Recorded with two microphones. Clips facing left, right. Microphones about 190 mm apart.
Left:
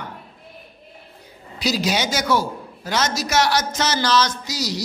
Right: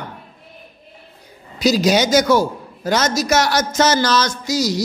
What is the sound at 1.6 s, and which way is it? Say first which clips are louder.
A man's voice: right 7 dB; 45° right (ahead or behind).